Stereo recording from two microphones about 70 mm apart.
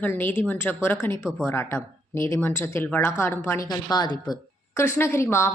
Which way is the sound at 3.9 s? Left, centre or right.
Left.